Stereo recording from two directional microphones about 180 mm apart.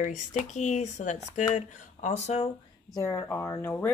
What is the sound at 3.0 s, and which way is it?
Speech, 15° left (ahead or behind).